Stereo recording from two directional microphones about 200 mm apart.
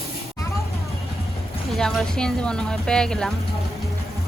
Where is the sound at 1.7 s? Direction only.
Centre (ahead or behind).